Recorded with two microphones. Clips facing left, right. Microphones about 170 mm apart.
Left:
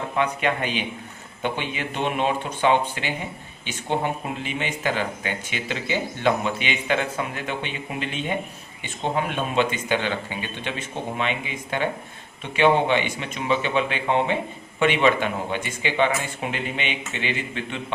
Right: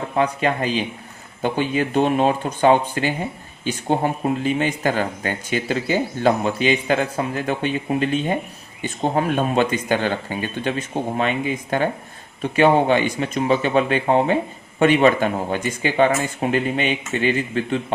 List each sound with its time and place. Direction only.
0.2 s speech: 35° right (ahead or behind)